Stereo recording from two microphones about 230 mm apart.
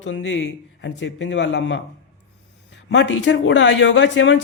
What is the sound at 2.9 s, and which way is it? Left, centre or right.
Speech, left.